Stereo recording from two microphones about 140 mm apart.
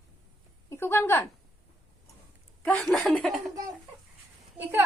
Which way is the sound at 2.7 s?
5° left (ahead or behind).